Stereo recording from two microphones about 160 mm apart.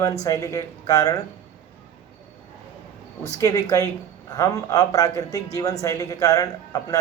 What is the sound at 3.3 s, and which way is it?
Speech, 20° left (ahead or behind).